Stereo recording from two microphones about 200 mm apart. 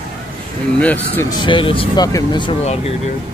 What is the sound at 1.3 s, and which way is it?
Speech, 25° left (ahead or behind).